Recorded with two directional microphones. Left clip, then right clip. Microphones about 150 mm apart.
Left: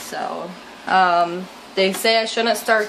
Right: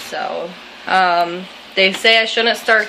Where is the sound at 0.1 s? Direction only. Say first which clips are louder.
Right 4 dB; 10° left (ahead or behind).